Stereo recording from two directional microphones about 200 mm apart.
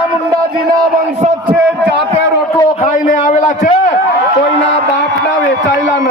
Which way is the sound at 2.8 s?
40° left (ahead or behind).